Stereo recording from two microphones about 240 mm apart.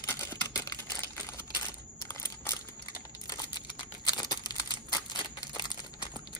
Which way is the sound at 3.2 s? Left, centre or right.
Centre.